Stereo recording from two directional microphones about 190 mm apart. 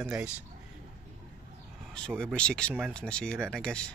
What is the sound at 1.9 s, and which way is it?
Speech, 5° left (ahead or behind).